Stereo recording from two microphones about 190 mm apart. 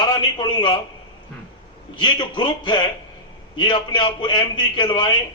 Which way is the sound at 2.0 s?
25° left (ahead or behind).